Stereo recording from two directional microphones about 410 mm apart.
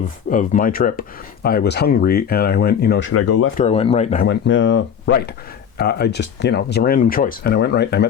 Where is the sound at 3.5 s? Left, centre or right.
Centre.